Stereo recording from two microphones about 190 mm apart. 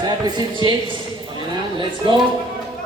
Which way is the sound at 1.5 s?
25° right (ahead or behind).